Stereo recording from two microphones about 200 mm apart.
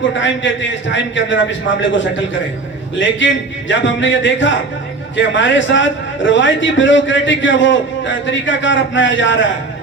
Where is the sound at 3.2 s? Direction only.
65° left (ahead or behind).